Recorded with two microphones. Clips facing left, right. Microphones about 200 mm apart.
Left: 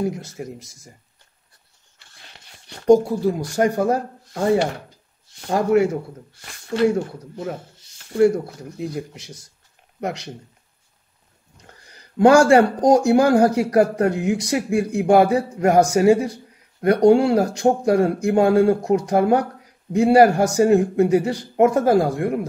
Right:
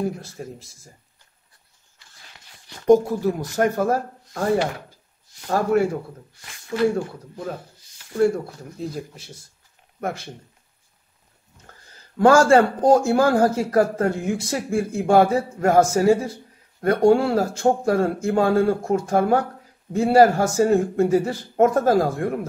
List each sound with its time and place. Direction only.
0.1 s speech: 20° left (ahead or behind)
2.3 s a sound: 30° left (ahead or behind)
2.9 s speech: 10° left (ahead or behind)
5.5 s speech: 20° left (ahead or behind)
11.5 s speech: 15° left (ahead or behind)